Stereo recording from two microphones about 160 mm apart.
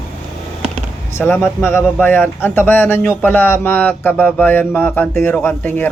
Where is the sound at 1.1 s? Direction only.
15° left (ahead or behind).